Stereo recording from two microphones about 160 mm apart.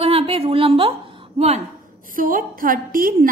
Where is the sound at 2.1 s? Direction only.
60° right (ahead or behind).